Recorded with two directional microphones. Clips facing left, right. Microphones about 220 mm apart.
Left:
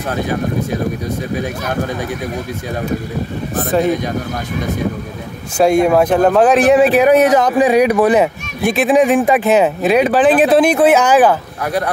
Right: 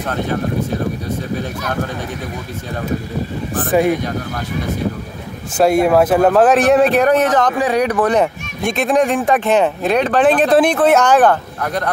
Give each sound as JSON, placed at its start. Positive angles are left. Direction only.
{"t": 5.6, "sound": "speech", "side_deg": -5}